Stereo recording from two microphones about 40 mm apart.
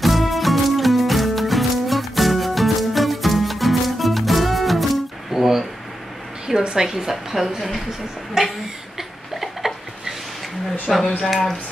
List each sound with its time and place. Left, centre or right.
0.0 s music: centre
6.4 s a woman's voice: centre
8.9 s a sound: centre
10.9 s speech: centre